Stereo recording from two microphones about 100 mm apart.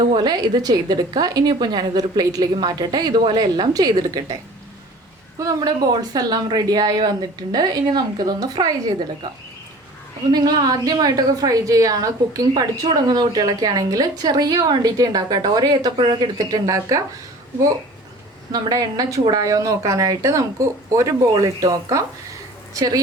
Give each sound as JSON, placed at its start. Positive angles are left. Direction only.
{"t": 0.0, "sound": "a woman's voice", "side_deg": -45}
{"t": 5.4, "sound": "a woman's voice", "side_deg": -40}
{"t": 10.3, "sound": "a woman's voice", "side_deg": -45}
{"t": 16.0, "sound": "speech", "side_deg": -60}
{"t": 16.4, "sound": "a woman's voice", "side_deg": -40}
{"t": 18.5, "sound": "a woman's voice", "side_deg": -40}